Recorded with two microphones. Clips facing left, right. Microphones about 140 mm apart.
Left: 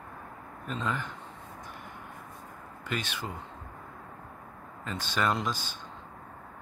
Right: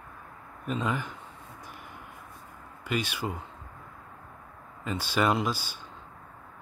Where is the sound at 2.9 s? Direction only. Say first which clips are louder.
Right 4 dB; 10° right (ahead or behind).